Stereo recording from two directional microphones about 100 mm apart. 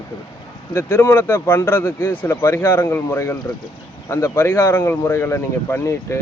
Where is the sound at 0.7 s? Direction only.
30° left (ahead or behind).